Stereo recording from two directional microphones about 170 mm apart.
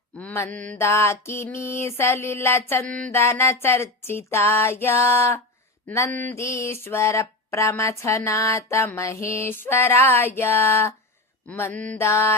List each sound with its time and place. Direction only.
0.2 s mantra: 10° left (ahead or behind)